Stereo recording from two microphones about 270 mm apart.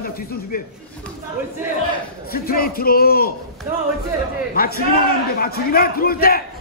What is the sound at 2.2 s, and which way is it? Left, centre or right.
A man's voice, left.